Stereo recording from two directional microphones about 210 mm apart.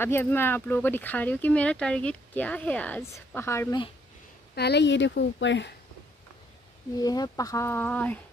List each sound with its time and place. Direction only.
0.0 s speech: 10° left (ahead or behind)
4.6 s a woman's voice: 50° left (ahead or behind)
7.0 s speech: 15° left (ahead or behind)